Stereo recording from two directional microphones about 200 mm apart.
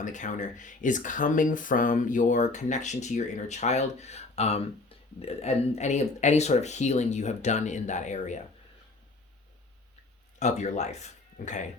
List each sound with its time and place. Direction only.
0.0 s speech: 40° left (ahead or behind)
10.4 s speech: 35° left (ahead or behind)